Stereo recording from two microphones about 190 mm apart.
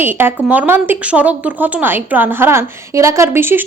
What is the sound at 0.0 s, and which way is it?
A woman's voice, 10° right (ahead or behind).